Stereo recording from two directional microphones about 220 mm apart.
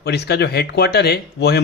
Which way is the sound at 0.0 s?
50° left (ahead or behind).